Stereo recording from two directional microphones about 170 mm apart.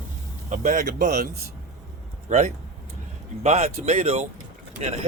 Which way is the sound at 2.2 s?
40° right (ahead or behind).